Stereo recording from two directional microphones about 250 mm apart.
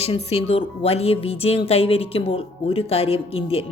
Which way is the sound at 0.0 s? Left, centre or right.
Left.